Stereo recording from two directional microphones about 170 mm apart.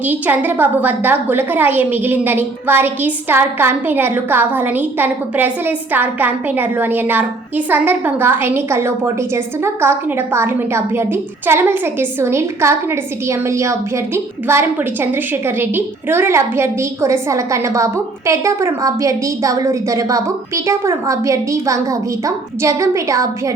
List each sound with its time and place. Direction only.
0.0 s a woman's voice: 10° right (ahead or behind)